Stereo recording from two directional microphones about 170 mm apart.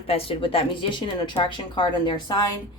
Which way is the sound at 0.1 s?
35° left (ahead or behind).